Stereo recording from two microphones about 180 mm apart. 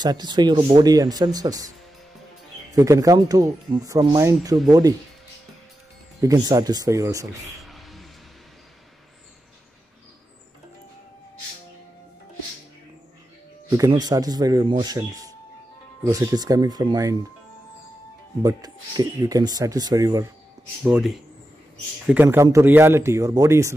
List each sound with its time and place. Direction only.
0.0 s speech: 25° right (ahead or behind)
2.7 s speech: 20° right (ahead or behind)
6.2 s speech: 20° right (ahead or behind)
7.6 s a sound: centre (ahead or behind)
13.7 s speech: 25° right (ahead or behind)
18.4 s speech: 20° right (ahead or behind)
20.8 s speech: 5° right (ahead or behind)